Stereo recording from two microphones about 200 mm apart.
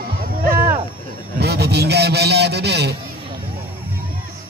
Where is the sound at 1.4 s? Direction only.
55° right (ahead or behind).